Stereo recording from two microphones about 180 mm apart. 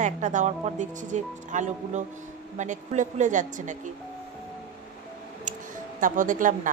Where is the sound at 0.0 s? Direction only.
40° right (ahead or behind).